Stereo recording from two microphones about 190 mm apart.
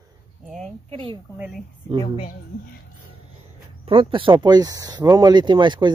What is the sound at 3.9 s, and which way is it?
Speech, 25° right (ahead or behind).